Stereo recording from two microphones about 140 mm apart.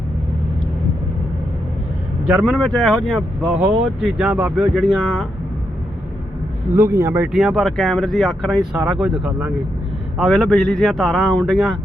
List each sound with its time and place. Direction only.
2.5 s speech: centre (ahead or behind)
3.5 s speech: 10° right (ahead or behind)
6.7 s speech: 20° right (ahead or behind)
7.3 s speech: centre (ahead or behind)